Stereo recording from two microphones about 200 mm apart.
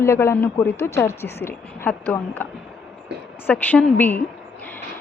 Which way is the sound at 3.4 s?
10° left (ahead or behind).